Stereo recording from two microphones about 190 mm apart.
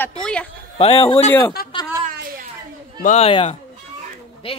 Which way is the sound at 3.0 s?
35° left (ahead or behind).